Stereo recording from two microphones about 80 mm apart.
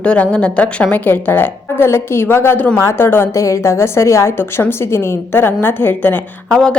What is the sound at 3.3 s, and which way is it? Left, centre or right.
A woman's voice, left.